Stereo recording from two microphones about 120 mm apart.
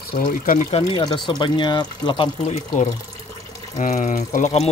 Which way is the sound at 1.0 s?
40° left (ahead or behind).